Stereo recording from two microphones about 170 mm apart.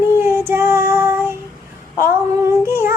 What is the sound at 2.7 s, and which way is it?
Music, 15° right (ahead or behind).